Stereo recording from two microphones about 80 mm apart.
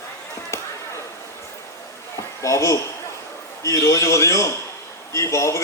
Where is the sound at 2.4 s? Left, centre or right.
Left.